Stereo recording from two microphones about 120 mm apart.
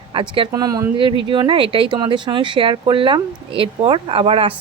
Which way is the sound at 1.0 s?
45° right (ahead or behind).